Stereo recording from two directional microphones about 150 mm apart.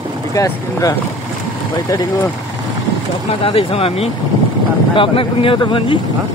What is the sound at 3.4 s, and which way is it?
Speech, 35° left (ahead or behind).